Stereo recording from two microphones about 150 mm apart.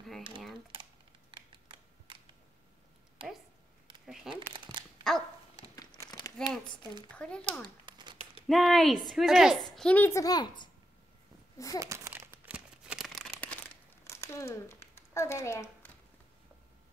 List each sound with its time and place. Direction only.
1.3 s computer keyboard: 35° right (ahead or behind)
3.2 s a sound: 35° right (ahead or behind)
4.0 s crumpling: 5° right (ahead or behind)
4.4 s a sound: 35° right (ahead or behind)
5.1 s dog: centre (ahead or behind)
5.8 s crumpling: 25° left (ahead or behind)
7.1 s speech: 5° left (ahead or behind)
7.6 s crumpling: 30° right (ahead or behind)
8.5 s a woman's voice: centre (ahead or behind); by 11.8 s 25° left (ahead or behind)
11.8 s crumpling: 20° right (ahead or behind); by 13.6 s 5° left (ahead or behind)
14.0 s a sound: 20° left (ahead or behind)